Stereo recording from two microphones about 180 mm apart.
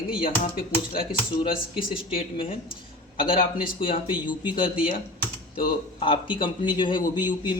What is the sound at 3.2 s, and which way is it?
Speech, 50° left (ahead or behind).